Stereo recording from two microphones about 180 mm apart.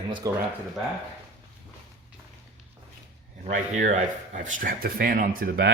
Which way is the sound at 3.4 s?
45° right (ahead or behind).